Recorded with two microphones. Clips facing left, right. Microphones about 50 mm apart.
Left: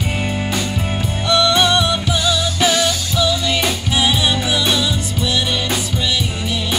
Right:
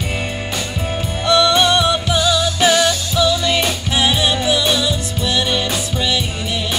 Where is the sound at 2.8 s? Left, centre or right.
Centre.